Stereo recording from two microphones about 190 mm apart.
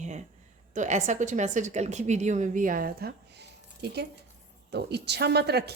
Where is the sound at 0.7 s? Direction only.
40° right (ahead or behind).